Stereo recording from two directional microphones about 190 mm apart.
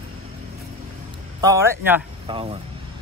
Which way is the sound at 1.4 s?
15° right (ahead or behind).